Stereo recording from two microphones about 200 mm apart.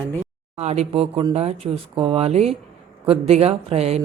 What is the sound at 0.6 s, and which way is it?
Speech, 35° right (ahead or behind).